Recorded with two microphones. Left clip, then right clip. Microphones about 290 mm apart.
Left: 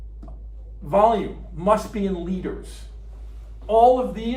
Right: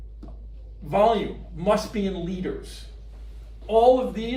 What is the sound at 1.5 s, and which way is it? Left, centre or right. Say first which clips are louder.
Speech: left 3 dB; centre.